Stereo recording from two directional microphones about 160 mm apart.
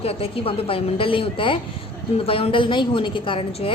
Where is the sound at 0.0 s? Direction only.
35° left (ahead or behind).